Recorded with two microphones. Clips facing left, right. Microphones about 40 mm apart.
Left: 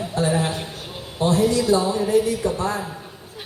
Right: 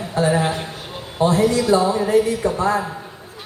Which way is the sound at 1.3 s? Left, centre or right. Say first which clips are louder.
Right 1 dB; right.